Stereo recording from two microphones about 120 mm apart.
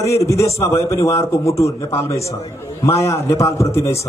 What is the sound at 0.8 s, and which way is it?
A man's voice, 25° left (ahead or behind).